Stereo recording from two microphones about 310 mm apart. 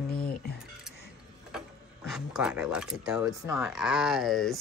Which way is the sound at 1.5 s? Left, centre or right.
Centre.